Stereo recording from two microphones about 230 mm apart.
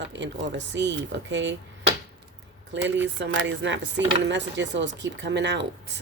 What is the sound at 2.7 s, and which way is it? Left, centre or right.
Speech, right.